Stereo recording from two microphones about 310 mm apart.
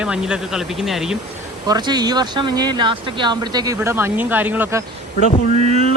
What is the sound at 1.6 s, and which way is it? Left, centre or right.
Speech, centre.